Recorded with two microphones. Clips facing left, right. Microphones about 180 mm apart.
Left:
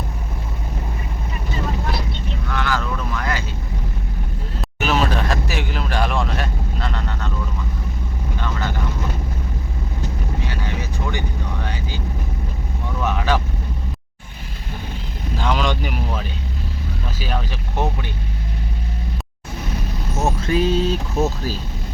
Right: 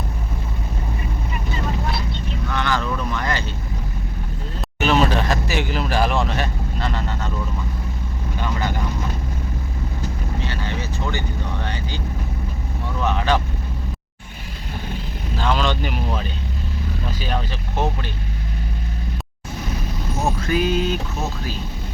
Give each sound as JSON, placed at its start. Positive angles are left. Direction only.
{"t": 2.5, "sound": "vehicle", "side_deg": 5}
{"t": 4.8, "sound": "vehicle", "side_deg": 0}
{"t": 10.4, "sound": "vehicle", "side_deg": 10}
{"t": 13.0, "sound": "vehicle", "side_deg": 10}
{"t": 15.4, "sound": "vehicle", "side_deg": 10}
{"t": 17.2, "sound": "vehicle", "side_deg": 10}
{"t": 20.4, "sound": "a sound", "side_deg": 30}